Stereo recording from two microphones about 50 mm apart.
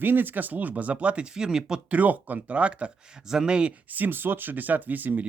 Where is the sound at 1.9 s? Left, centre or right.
Right.